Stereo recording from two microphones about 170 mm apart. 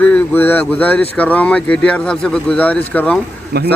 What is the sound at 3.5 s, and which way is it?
Speech, 70° right (ahead or behind).